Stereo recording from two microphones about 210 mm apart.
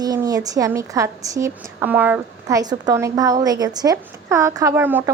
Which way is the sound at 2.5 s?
20° right (ahead or behind).